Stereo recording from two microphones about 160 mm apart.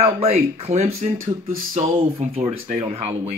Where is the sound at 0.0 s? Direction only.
40° right (ahead or behind).